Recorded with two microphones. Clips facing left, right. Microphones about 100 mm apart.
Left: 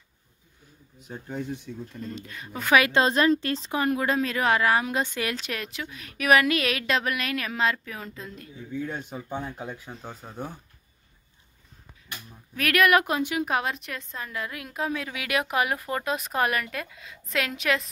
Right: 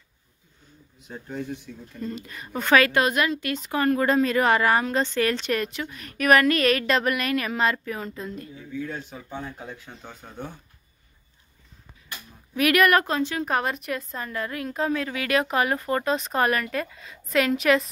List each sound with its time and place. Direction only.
1.7 s a woman's voice: 25° left (ahead or behind)
2.0 s a woman's voice: centre (ahead or behind)
2.7 s a woman's voice: 20° left (ahead or behind)
3.7 s speech: 15° left (ahead or behind)
4.0 s a woman's voice: centre (ahead or behind)
8.7 s speech: 15° left (ahead or behind)
12.5 s a woman's voice: 5° right (ahead or behind)
12.9 s a woman's voice: 15° left (ahead or behind)